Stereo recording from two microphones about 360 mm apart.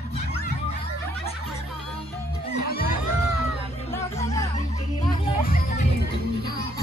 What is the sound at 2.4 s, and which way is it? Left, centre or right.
Music, left.